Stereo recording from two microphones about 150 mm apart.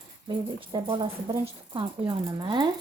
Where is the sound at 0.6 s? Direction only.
35° right (ahead or behind).